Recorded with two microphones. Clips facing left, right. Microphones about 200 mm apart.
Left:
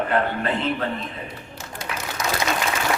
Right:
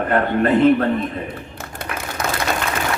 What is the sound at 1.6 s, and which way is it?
Clapping, 55° right (ahead or behind).